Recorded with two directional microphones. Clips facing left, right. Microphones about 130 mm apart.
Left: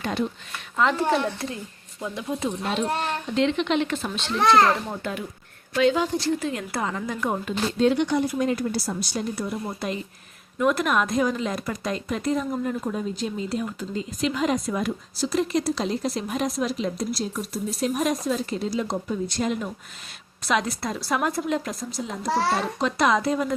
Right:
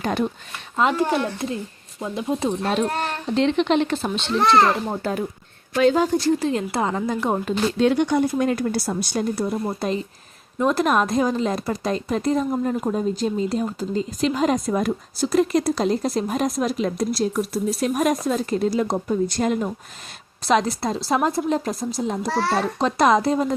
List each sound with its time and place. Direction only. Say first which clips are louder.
0.0 s speech: right 3 dB; 55° right (ahead or behind)
0.8 s a woman's voice: right 2 dB; 20° right (ahead or behind)
4.4 s a child's voice: right 1 dB; 5° right (ahead or behind)
4.9 s speech: right 6 dB; 40° right (ahead or behind)
6.4 s a woman's voice: right 5 dB; 30° right (ahead or behind)
7.8 s speech: right 2 dB; 55° right (ahead or behind); by 17.6 s 70° right (ahead or behind)
17.9 s speech: right 3 dB; 50° right (ahead or behind); by 23.6 s 30° right (ahead or behind)